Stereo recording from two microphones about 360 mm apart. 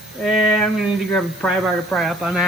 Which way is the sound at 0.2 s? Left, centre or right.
Centre.